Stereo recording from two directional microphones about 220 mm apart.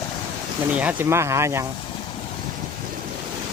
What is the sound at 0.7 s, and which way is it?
Speech, 5° right (ahead or behind).